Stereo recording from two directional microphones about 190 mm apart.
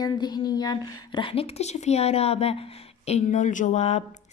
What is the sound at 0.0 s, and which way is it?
Speech, 20° left (ahead or behind).